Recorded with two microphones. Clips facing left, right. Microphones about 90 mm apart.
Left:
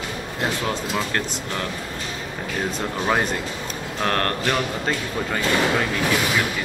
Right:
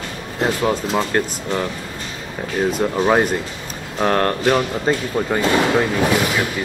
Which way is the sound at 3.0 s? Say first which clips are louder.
Right 5 dB; 20° right (ahead or behind).